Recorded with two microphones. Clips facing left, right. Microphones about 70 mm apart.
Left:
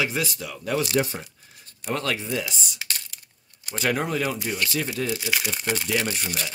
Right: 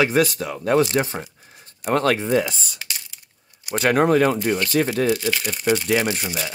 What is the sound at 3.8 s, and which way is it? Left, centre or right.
Speech, right.